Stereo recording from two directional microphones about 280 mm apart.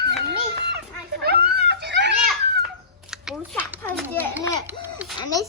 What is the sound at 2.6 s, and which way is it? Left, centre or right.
Children playing, centre.